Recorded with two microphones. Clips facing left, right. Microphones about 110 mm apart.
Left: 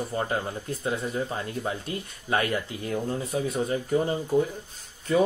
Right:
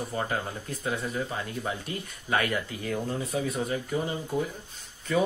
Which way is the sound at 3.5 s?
35° left (ahead or behind).